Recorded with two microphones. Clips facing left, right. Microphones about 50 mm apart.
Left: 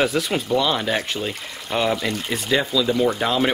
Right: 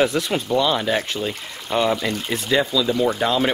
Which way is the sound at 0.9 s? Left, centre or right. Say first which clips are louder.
Right 1 dB; centre.